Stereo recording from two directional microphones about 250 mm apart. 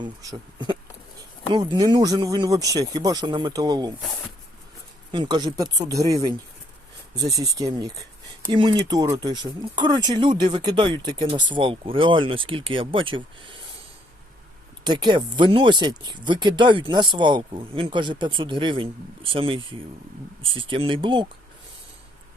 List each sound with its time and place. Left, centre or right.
0.0 s speech: centre
5.1 s speech: centre
14.8 s speech: centre